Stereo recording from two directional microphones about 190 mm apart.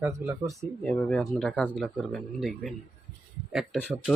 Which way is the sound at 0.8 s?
5° left (ahead or behind).